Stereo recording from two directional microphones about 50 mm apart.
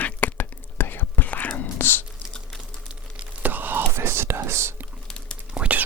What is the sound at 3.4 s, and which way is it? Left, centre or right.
Whispering, right.